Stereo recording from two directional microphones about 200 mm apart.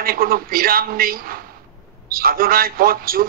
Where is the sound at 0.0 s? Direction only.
45° right (ahead or behind).